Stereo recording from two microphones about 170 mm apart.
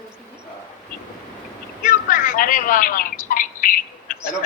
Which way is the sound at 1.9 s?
55° left (ahead or behind).